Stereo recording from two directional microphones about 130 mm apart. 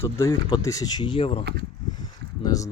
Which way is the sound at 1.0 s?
40° left (ahead or behind).